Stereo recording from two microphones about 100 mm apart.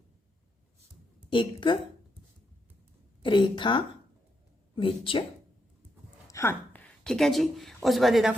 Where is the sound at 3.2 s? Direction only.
50° left (ahead or behind).